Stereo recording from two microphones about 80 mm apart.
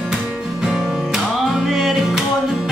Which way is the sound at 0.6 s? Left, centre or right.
Centre.